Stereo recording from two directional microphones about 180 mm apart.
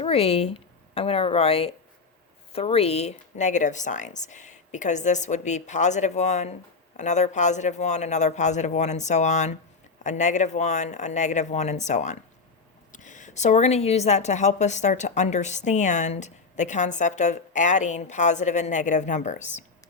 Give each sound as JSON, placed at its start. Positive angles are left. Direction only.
{"t": 0.0, "sound": "a woman's voice", "side_deg": 35}